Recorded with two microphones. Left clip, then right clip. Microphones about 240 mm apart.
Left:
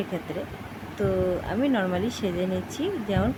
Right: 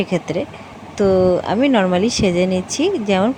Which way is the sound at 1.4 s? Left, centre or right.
Right.